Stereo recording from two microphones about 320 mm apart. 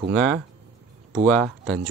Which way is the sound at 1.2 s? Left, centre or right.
Centre.